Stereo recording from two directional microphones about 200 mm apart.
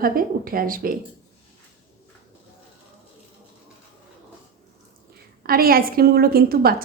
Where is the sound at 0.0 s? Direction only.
45° right (ahead or behind).